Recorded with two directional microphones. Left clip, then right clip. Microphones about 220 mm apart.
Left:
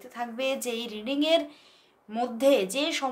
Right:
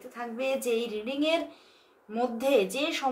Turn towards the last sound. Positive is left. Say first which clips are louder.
# even
turn(degrees=40)  # may be behind; listen again after turning